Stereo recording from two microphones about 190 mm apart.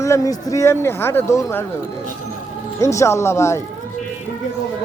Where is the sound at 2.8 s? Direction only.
15° left (ahead or behind).